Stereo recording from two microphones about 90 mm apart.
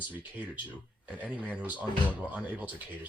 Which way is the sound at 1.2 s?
15° right (ahead or behind).